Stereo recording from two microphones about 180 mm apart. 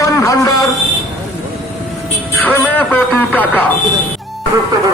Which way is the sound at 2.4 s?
10° left (ahead or behind).